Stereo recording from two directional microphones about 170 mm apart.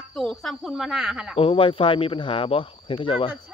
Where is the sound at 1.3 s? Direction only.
35° left (ahead or behind).